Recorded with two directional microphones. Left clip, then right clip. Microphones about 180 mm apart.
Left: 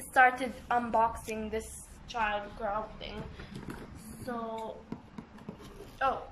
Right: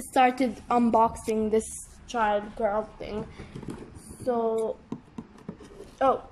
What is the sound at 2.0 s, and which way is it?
A woman's voice, 40° right (ahead or behind).